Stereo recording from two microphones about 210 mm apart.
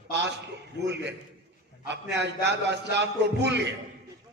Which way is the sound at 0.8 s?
55° right (ahead or behind).